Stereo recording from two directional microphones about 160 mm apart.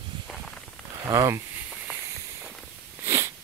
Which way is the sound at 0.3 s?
Centre (ahead or behind).